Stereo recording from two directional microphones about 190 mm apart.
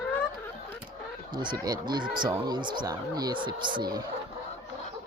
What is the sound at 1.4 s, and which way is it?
Speech, 20° right (ahead or behind).